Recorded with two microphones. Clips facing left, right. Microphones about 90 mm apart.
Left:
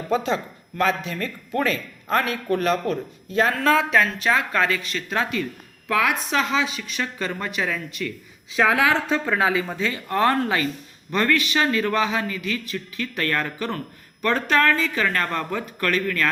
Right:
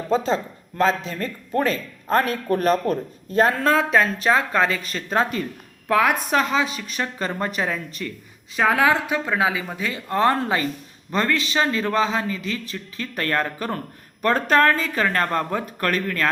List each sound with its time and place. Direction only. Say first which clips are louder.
0.1 s speech: right 2 dB; 30° right (ahead or behind)
8.9 s a man's voice: even; 10° right (ahead or behind); by 16.3 s 40° right (ahead or behind)